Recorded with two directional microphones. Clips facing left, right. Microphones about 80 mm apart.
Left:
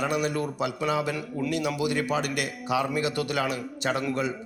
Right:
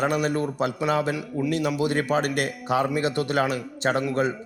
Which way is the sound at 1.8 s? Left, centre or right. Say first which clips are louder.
Right 3 dB; right.